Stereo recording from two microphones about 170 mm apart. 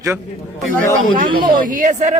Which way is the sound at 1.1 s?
55° right (ahead or behind).